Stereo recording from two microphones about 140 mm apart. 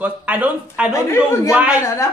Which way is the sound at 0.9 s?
20° left (ahead or behind).